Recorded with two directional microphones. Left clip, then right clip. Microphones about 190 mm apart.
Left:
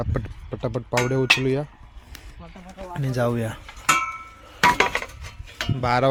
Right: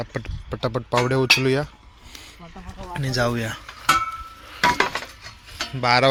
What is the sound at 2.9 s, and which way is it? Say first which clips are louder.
Cutlery: right 1 dB; 15° left (ahead or behind).